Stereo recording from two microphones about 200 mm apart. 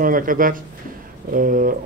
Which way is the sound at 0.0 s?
45° right (ahead or behind).